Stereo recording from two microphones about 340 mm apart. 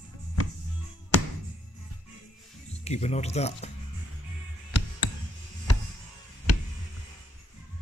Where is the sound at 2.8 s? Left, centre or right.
Centre.